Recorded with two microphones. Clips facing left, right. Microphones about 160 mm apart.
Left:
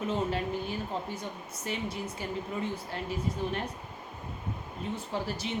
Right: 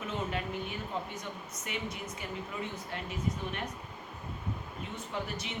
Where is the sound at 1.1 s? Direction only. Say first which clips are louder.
Left 3 dB; 30° left (ahead or behind).